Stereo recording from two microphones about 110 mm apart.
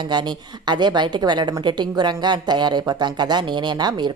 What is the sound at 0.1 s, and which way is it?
A woman's voice, 40° right (ahead or behind).